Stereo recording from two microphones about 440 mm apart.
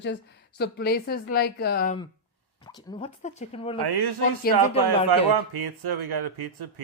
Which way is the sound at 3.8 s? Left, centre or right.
Right.